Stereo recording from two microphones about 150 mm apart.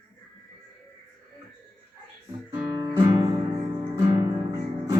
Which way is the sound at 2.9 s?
25° right (ahead or behind).